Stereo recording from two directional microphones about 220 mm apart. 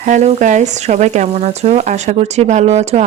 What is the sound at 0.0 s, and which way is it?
Speech, 35° right (ahead or behind).